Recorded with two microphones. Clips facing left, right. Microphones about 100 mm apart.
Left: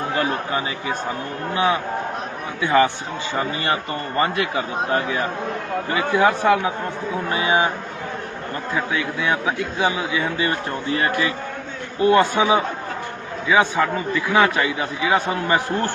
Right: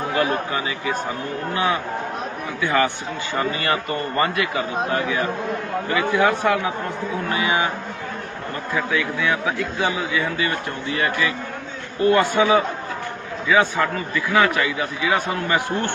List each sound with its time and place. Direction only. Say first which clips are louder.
0.2 s a man's voice: right 2 dB; 30° left (ahead or behind)
4.2 s a man's voice: left 2 dB; 30° left (ahead or behind)
8.7 s a man's voice: right 1 dB; 25° left (ahead or behind)